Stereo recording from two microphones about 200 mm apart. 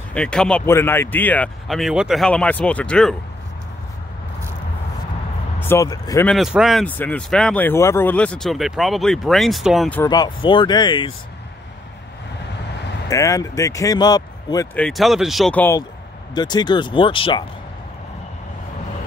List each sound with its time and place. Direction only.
0.1 s speech: 5° left (ahead or behind)
5.6 s speech: 15° left (ahead or behind)
6.2 s speech: centre (ahead or behind)
10.0 s speech: 20° left (ahead or behind)
13.1 s speech: 15° left (ahead or behind)
14.8 s speech: centre (ahead or behind)
16.3 s speech: 20° left (ahead or behind)